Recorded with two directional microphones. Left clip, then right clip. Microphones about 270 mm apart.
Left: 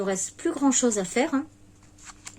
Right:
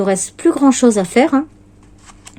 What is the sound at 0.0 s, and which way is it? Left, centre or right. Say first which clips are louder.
Speech: right 12 dB; right.